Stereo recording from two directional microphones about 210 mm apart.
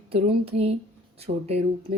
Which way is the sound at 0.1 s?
30° right (ahead or behind).